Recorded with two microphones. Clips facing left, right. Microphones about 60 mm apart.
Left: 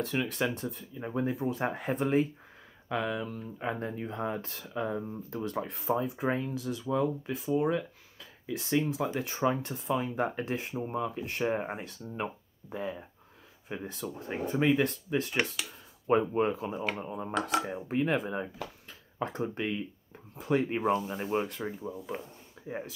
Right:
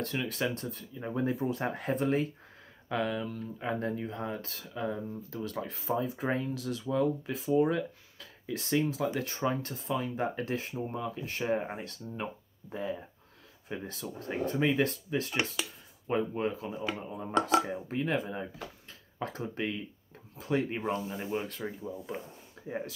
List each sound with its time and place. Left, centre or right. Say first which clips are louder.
0.0 s speech: left 2 dB; centre
2.0 s speech: left 3 dB; centre
2.9 s speech: even; centre
3.7 s speech: right 2 dB; centre
5.3 s speech: left 4 dB; centre; by 11.2 s left
11.2 s speech: left 1 dB; centre
16.1 s speech: left 4 dB; left
17.1 s speech: right 5 dB; centre
19.2 s speech: left 3 dB; left
19.5 s speech: left 1 dB; centre
20.7 s speech: left 4 dB; centre
21.9 s speech: left 1 dB; centre